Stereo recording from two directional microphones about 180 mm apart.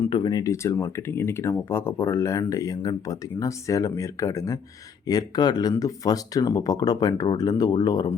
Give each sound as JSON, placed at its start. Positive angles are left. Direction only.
{"t": 0.0, "sound": "speech", "side_deg": 20}